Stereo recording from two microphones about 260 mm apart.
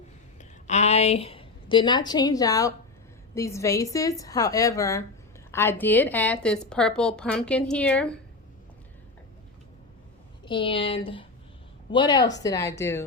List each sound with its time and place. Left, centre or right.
0.3 s a woman's voice: left; by 8.2 s centre
10.4 s a woman's voice: centre